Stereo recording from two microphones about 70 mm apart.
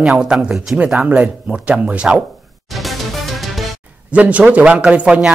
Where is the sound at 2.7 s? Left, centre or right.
Centre.